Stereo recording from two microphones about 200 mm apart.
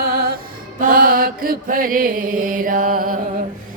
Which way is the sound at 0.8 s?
45° right (ahead or behind).